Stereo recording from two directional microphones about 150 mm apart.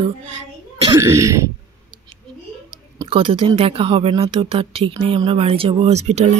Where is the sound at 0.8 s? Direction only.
20° right (ahead or behind).